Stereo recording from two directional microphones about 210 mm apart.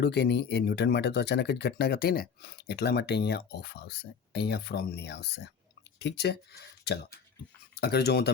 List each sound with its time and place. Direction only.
0.0 s speech: 50° left (ahead or behind)